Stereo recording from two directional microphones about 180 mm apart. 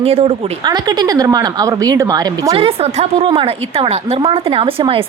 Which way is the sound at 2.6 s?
35° right (ahead or behind).